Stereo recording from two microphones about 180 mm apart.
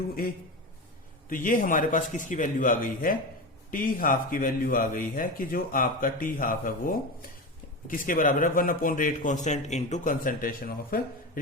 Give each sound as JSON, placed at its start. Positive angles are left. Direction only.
{"t": 1.3, "sound": "speech", "side_deg": 50}